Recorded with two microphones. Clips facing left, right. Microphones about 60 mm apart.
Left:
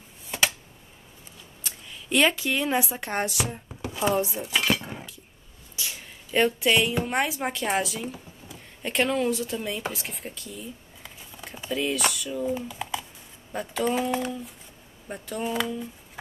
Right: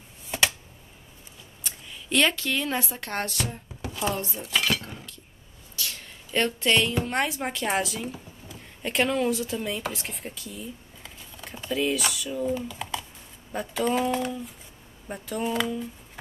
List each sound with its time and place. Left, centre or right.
1.6 s speech: centre
3.8 s a sound: left
4.4 s cutlery: centre
5.8 s a woman's voice: centre